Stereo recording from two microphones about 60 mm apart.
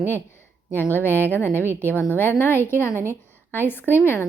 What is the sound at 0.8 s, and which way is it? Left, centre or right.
A woman's voice, left.